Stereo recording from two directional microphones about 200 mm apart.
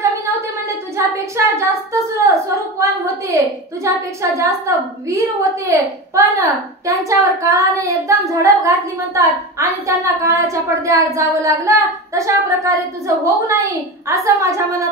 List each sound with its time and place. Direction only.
0.9 s speech: 15° right (ahead or behind)
2.8 s speech: 15° right (ahead or behind)